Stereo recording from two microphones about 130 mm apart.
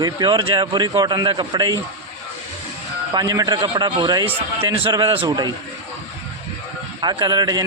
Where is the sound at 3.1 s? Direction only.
30° right (ahead or behind).